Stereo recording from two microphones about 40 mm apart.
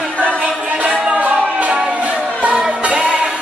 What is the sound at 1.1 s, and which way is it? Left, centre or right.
Music, right.